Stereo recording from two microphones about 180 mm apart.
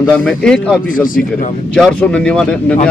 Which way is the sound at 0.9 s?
50° left (ahead or behind).